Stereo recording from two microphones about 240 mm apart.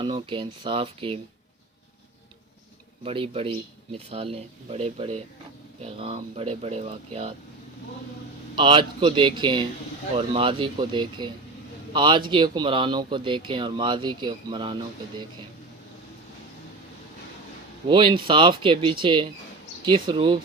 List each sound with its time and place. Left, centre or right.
0.0 s speech: right
3.0 s speech: right
8.5 s speech: right
17.8 s speech: right